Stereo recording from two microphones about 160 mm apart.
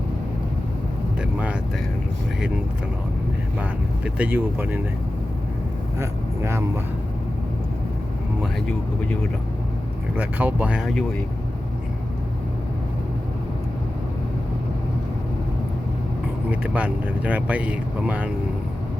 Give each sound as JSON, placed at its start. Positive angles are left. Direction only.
{"t": 3.6, "sound": "speech", "side_deg": -10}
{"t": 6.0, "sound": "speech", "side_deg": -15}
{"t": 10.2, "sound": "speech", "side_deg": -10}
{"t": 16.5, "sound": "speech", "side_deg": -10}